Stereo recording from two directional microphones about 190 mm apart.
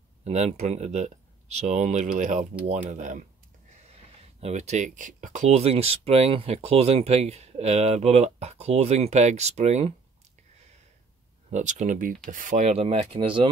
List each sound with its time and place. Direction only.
0.2 s speech: 35° right (ahead or behind)
4.4 s speech: 35° right (ahead or behind)
11.5 s speech: 40° right (ahead or behind)